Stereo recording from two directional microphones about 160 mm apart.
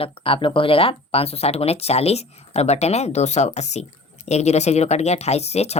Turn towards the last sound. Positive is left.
turn(degrees=40)  # may be behind; listen again after turning